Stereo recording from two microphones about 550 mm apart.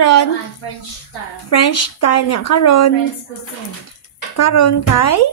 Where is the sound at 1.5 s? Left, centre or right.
Left.